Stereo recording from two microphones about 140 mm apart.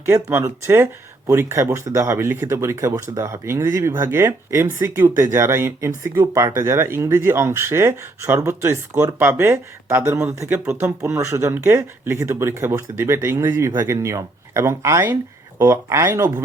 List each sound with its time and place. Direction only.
0.1 s speech: 15° right (ahead or behind)